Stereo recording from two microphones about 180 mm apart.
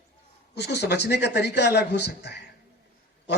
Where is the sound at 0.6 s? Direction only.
65° left (ahead or behind).